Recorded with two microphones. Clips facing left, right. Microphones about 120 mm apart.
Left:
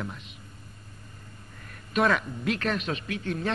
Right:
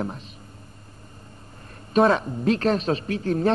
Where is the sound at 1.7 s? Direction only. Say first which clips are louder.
Right 6 dB; 30° right (ahead or behind).